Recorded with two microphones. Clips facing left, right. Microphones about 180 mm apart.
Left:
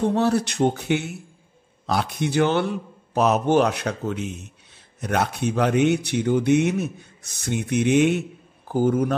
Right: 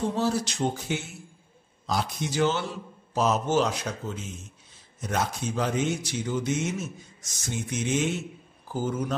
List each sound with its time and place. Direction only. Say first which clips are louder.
0.0 s speech: left 6 dB; 60° left (ahead or behind)